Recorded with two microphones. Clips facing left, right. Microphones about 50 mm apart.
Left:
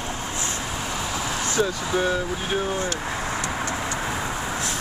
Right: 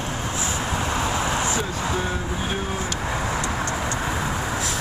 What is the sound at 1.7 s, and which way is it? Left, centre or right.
Speech, centre.